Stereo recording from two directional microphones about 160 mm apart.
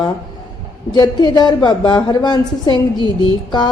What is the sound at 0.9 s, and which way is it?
A woman's voice, 25° left (ahead or behind).